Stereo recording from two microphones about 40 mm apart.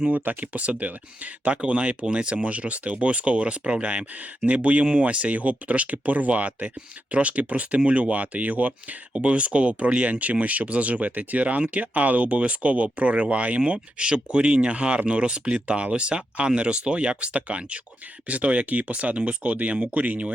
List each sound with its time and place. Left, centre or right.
0.1 s speech: right